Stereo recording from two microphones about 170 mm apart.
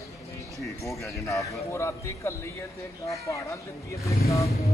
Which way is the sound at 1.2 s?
15° left (ahead or behind).